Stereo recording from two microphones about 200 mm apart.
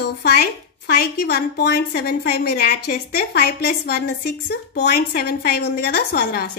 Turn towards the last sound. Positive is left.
turn(degrees=55)  # may be behind; listen again after turning